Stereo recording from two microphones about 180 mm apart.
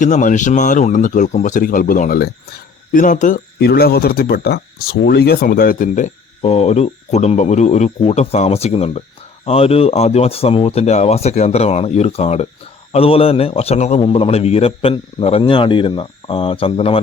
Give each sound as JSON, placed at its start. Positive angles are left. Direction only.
{"t": 0.0, "sound": "a man's voice", "side_deg": 45}